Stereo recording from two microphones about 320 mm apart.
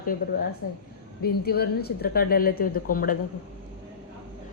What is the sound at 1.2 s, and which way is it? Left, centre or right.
A woman's voice, left.